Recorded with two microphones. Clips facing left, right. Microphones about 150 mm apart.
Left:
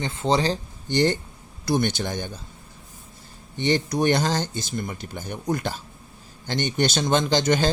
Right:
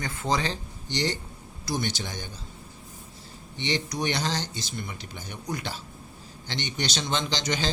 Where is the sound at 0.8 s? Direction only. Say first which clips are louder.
Left 8 dB; 55° left (ahead or behind).